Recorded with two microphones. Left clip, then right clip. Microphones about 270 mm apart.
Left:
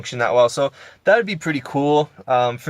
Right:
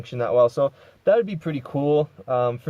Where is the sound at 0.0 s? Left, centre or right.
Centre.